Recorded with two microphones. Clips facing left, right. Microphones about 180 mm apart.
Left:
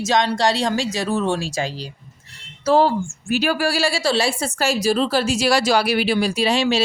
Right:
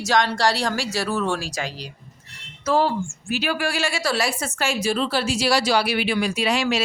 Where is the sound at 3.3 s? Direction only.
40° left (ahead or behind).